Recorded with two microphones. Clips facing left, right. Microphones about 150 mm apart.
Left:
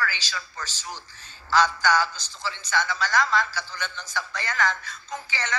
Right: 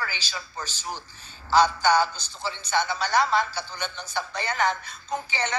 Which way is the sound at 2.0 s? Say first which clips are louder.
Right 2 dB; 50° right (ahead or behind).